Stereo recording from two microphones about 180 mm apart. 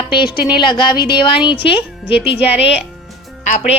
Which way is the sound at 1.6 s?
30° left (ahead or behind).